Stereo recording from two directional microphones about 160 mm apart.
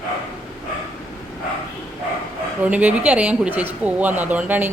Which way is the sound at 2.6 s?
10° right (ahead or behind).